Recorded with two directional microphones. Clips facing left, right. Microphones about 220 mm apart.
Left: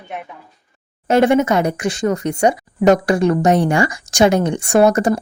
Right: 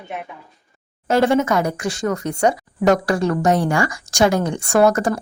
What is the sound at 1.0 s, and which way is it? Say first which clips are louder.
Speech: left 3 dB; 20° left (ahead or behind).